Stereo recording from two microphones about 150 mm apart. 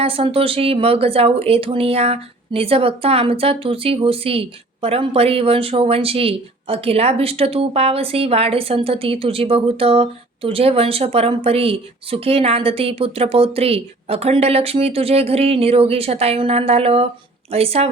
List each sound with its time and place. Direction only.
0.0 s speech: 40° right (ahead or behind)